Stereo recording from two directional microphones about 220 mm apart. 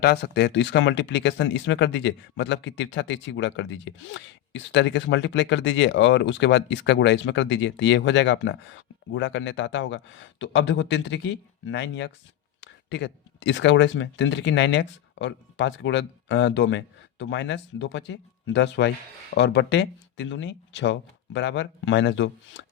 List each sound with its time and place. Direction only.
0.0 s speech: 50° left (ahead or behind)